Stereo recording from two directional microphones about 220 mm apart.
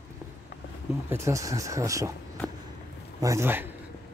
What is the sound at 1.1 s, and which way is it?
Speech, 15° right (ahead or behind).